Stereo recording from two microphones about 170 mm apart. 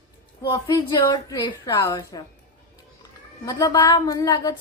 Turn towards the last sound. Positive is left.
turn(degrees=20)  # may be behind; listen again after turning